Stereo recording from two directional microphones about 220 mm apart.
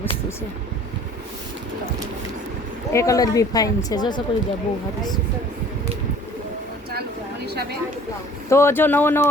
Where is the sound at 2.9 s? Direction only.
15° left (ahead or behind).